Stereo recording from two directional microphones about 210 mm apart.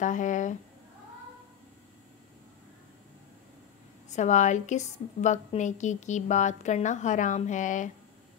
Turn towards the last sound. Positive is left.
turn(degrees=35)  # may be behind; listen again after turning